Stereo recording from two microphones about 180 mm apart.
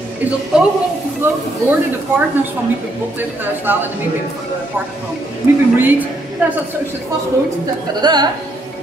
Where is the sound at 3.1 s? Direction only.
10° right (ahead or behind).